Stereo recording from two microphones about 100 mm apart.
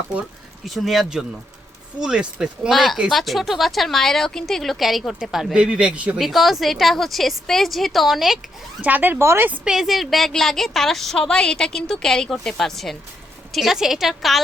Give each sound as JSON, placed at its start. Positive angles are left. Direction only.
{"t": 0.1, "sound": "speech", "side_deg": -15}
{"t": 0.6, "sound": "a woman's voice", "side_deg": 0}
{"t": 6.1, "sound": "a woman's voice", "side_deg": 0}
{"t": 8.8, "sound": "speech", "side_deg": -15}
{"t": 9.6, "sound": "a woman's voice", "side_deg": -5}